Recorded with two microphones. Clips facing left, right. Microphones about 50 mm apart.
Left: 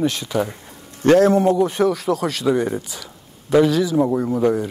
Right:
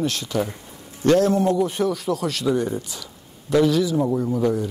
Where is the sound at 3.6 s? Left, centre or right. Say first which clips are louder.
Left 2 dB; left.